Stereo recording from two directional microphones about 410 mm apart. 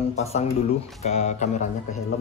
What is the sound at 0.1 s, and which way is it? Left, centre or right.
Speech, centre.